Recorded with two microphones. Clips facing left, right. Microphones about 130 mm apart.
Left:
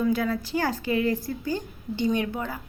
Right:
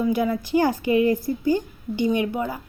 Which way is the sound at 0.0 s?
15° right (ahead or behind).